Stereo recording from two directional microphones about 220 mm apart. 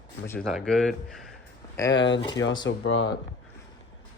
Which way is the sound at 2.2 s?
20° left (ahead or behind).